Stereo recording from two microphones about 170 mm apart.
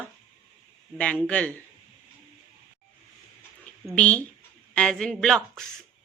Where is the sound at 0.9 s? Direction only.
5° left (ahead or behind).